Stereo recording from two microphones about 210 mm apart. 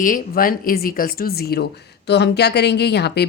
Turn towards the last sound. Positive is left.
turn(degrees=50)  # may be behind; listen again after turning